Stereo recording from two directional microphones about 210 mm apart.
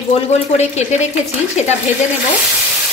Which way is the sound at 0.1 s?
30° left (ahead or behind).